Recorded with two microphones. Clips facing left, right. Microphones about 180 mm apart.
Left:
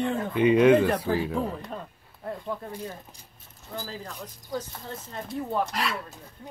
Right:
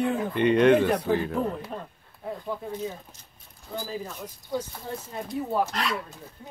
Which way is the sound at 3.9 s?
10° right (ahead or behind).